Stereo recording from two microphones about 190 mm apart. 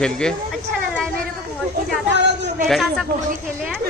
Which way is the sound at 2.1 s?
65° right (ahead or behind).